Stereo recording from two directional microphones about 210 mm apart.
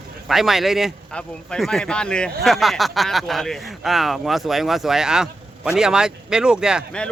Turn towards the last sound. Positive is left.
turn(degrees=0)  # may be behind; listen again after turning